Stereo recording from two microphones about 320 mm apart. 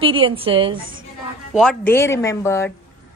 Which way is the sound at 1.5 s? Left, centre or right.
Centre.